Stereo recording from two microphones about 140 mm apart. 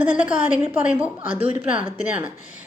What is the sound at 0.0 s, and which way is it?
Speech, 10° right (ahead or behind).